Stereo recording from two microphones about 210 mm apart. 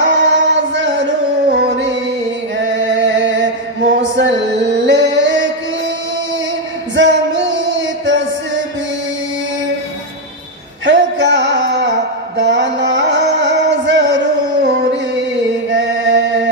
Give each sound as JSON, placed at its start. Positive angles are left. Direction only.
{"t": 0.0, "sound": "music", "side_deg": -60}
{"t": 2.6, "sound": "chant", "side_deg": -60}
{"t": 4.8, "sound": "music", "side_deg": -60}
{"t": 7.0, "sound": "music", "side_deg": -60}
{"t": 10.9, "sound": "music", "side_deg": -60}
{"t": 15.7, "sound": "chant", "side_deg": -60}